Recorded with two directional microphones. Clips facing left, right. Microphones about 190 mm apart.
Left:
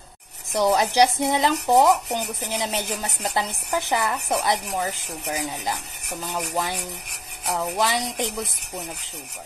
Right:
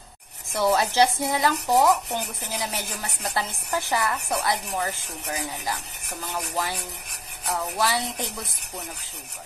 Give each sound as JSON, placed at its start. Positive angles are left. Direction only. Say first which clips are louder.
{"t": 0.5, "sound": "speech", "louder": "left 2 dB", "side_deg": 15}